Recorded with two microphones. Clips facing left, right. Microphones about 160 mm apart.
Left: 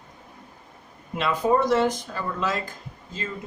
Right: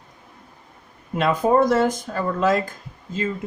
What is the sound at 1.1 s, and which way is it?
Speech, 50° right (ahead or behind).